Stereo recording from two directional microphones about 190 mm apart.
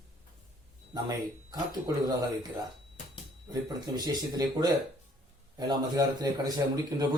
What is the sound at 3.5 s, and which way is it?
A man's voice, 20° right (ahead or behind).